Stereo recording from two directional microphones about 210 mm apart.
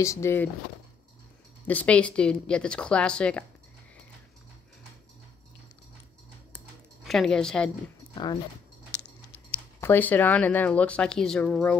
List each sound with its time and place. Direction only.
0.0 s speech: 15° left (ahead or behind)
1.7 s speech: 5° left (ahead or behind)
7.1 s speech: centre (ahead or behind)
8.1 s speech: 20° left (ahead or behind)
9.8 s speech: 10° left (ahead or behind)